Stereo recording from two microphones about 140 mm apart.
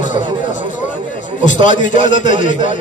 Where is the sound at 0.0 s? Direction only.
65° left (ahead or behind).